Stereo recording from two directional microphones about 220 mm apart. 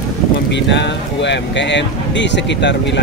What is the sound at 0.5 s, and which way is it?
Speech, 55° left (ahead or behind).